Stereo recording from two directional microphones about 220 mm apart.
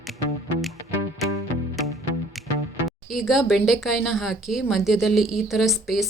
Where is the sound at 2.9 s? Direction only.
Centre (ahead or behind).